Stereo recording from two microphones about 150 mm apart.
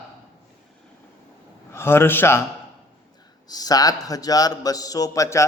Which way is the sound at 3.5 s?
25° left (ahead or behind).